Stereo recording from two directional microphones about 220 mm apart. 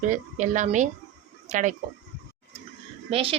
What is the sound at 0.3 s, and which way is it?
A woman's voice, 35° right (ahead or behind).